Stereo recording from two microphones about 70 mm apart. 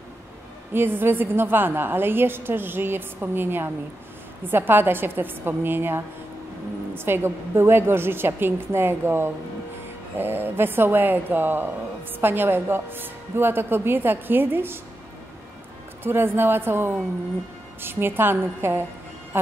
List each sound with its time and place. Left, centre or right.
0.7 s speech: right
16.0 s speech: right